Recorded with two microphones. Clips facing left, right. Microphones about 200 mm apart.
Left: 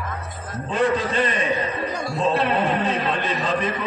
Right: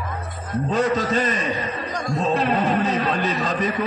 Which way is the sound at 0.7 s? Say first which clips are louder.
Even; 40° right (ahead or behind).